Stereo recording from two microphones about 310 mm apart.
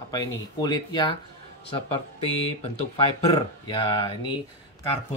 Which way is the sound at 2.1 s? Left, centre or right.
Centre.